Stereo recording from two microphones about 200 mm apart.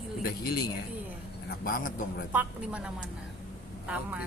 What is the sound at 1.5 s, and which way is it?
Speech, 45° left (ahead or behind).